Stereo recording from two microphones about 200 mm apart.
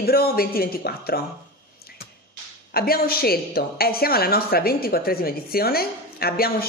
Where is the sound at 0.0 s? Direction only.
50° left (ahead or behind).